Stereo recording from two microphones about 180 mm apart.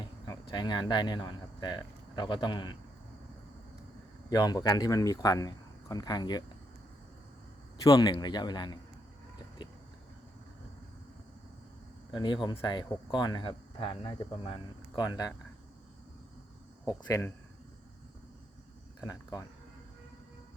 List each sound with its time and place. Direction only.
0.0 s speech: 25° left (ahead or behind)
4.3 s speech: 20° left (ahead or behind)
7.9 s speech: 20° left (ahead or behind)
9.6 s a sound: 25° left (ahead or behind)
12.1 s speech: 25° left (ahead or behind)
16.8 s speech: 20° left (ahead or behind)
18.9 s speech: 20° left (ahead or behind)